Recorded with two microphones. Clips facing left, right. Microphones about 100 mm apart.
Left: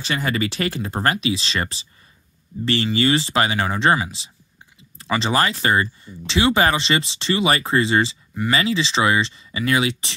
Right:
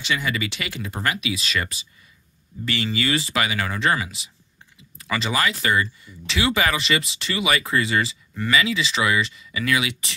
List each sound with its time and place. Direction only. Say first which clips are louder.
0.0 s speech: left 3 dB; 40° left (ahead or behind)